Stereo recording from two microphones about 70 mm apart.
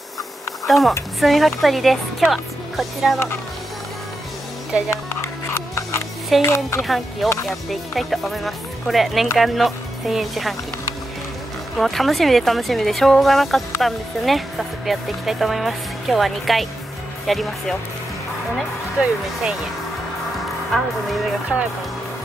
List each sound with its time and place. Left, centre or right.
0.7 s a woman's voice: centre
4.7 s speech: centre
5.5 s music: left
6.4 s speech: left
6.8 s speech: centre
11.8 s speech: centre
20.7 s speech: centre